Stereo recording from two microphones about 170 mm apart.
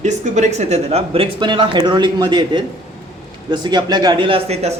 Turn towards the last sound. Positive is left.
turn(degrees=-35)  # may be behind; listen again after turning